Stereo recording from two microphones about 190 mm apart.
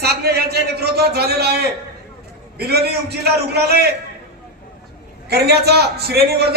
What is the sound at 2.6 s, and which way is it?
A man's voice, 55° right (ahead or behind).